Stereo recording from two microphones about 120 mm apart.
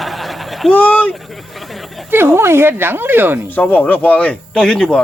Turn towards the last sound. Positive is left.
turn(degrees=5)  # may be behind; listen again after turning